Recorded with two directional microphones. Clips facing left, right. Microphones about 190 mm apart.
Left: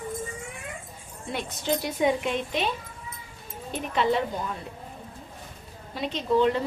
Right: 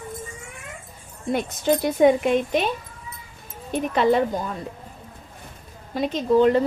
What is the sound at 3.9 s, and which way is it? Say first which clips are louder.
Speech: right 5 dB; 45° right (ahead or behind).